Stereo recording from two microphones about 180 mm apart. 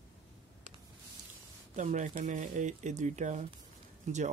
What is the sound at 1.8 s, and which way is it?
Speech, 45° right (ahead or behind).